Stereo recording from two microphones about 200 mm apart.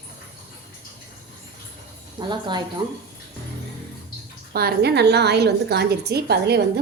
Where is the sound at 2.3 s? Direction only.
20° right (ahead or behind).